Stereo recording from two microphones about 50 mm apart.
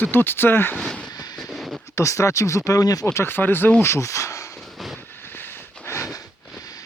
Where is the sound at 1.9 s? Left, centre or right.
Left.